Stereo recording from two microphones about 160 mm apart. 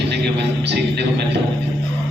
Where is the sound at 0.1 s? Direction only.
90° right.